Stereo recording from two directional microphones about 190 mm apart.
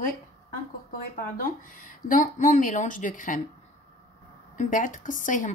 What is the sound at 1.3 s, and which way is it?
Speech, 50° left (ahead or behind).